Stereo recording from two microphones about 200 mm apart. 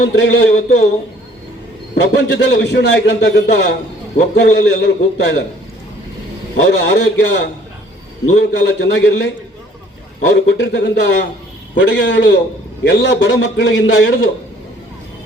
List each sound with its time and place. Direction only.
0.0 s a man's voice: 60° left (ahead or behind)
2.0 s a man's voice: 60° left (ahead or behind)
6.6 s a man's voice: 60° left (ahead or behind)